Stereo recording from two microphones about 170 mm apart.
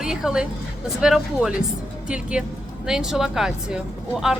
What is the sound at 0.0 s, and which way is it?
A woman's voice, 5° right (ahead or behind).